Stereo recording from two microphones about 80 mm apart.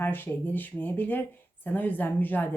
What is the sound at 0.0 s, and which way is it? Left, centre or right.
Speech, left.